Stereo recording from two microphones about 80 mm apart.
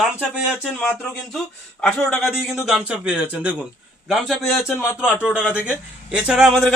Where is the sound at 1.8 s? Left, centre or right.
Centre.